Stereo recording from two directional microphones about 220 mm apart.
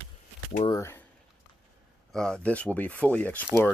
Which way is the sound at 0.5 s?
20° left (ahead or behind).